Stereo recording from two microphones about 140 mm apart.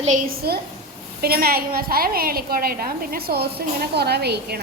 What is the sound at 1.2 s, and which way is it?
A woman's voice, 90° right.